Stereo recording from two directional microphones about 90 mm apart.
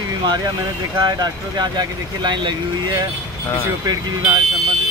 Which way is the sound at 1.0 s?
50° right (ahead or behind).